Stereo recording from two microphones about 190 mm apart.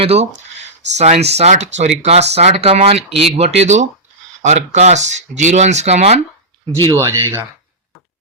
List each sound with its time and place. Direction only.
0.0 s speech: 30° right (ahead or behind)
6.9 s speech: 15° right (ahead or behind)